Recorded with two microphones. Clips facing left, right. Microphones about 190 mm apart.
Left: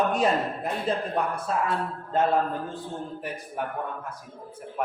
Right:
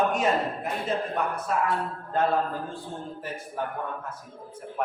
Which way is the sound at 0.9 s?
35° left (ahead or behind).